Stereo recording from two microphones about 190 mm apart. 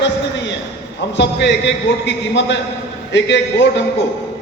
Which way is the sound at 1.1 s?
65° left (ahead or behind).